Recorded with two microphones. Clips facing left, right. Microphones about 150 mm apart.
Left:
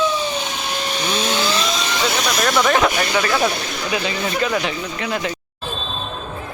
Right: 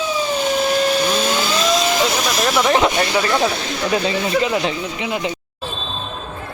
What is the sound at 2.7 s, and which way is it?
Speech, 25° right (ahead or behind).